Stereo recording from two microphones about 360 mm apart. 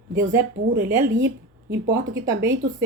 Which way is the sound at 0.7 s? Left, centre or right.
Right.